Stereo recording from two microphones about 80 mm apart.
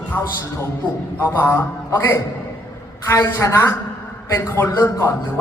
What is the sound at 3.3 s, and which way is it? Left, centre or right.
A man's voice, left.